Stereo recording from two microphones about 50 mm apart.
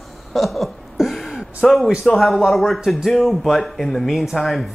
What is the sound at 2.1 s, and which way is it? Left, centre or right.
Speech, centre.